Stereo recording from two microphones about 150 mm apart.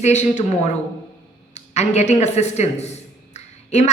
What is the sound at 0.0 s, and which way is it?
A woman's voice, 50° left (ahead or behind).